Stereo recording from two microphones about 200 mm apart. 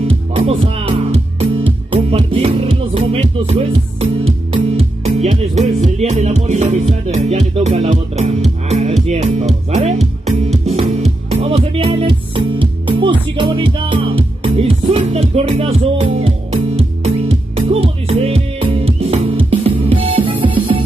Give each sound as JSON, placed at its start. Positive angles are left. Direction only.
{"t": 0.3, "sound": "music", "side_deg": -25}
{"t": 10.6, "sound": "music", "side_deg": -30}